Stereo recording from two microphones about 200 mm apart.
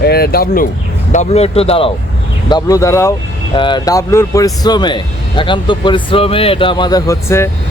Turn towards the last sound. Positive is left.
turn(degrees=15)  # may be behind; listen again after turning